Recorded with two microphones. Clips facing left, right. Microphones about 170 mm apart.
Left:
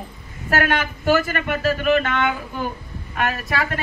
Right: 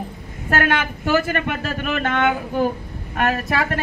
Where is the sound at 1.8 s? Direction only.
45° right (ahead or behind).